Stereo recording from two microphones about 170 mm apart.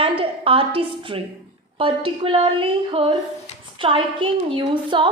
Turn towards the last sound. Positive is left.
turn(degrees=-30)  # may be behind; listen again after turning